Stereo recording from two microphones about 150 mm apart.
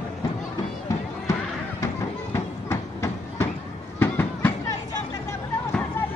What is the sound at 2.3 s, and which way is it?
Train, 20° left (ahead or behind).